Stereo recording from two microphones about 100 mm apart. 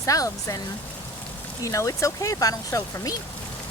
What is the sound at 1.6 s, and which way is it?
Speech, 35° left (ahead or behind).